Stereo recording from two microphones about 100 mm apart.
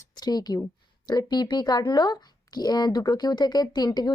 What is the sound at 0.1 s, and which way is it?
Speech, 40° left (ahead or behind).